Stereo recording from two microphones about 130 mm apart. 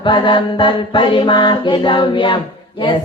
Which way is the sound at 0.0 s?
35° left (ahead or behind).